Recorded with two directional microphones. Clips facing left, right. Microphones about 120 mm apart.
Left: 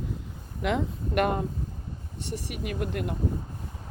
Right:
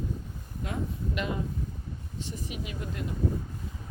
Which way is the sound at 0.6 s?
70° left (ahead or behind).